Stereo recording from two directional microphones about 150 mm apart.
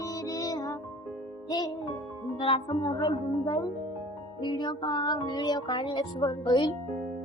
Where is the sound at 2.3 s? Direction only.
35° left (ahead or behind).